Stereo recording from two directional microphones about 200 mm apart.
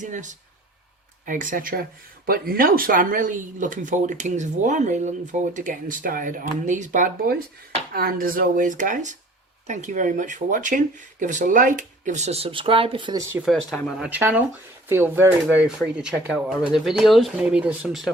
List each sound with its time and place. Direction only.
0.0 s speech: 40° right (ahead or behind); by 13.2 s 25° right (ahead or behind)
13.3 s speech: centre (ahead or behind)
14.0 s speech: 10° right (ahead or behind)